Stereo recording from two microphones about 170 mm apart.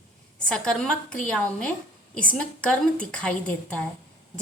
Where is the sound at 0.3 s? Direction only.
5° left (ahead or behind).